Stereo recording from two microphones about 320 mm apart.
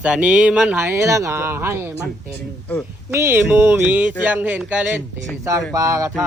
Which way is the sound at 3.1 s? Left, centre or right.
Centre.